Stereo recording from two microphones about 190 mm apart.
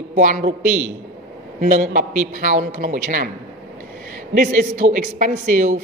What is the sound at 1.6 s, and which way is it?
A woman's voice, 45° right (ahead or behind).